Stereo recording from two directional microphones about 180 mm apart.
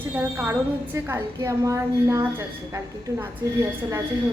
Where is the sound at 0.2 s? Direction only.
10° right (ahead or behind).